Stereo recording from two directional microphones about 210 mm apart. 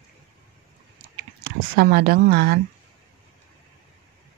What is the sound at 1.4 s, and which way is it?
Speech, 50° right (ahead or behind).